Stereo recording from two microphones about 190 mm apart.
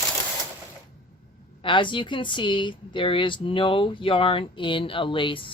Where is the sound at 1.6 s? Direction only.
25° left (ahead or behind).